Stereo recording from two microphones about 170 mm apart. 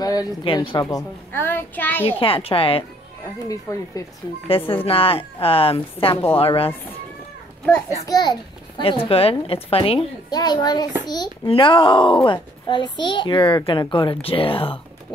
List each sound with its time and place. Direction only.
0.0 s a child's voice: 25° left (ahead or behind)
2.1 s a woman's voice: 35° left (ahead or behind)
3.7 s a child's voice: 20° left (ahead or behind)
4.5 s a woman's voice: 30° left (ahead or behind)
8.0 s a child's voice: 25° left (ahead or behind)